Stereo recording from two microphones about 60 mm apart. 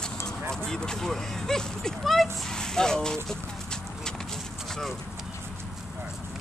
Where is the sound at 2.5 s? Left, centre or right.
Centre.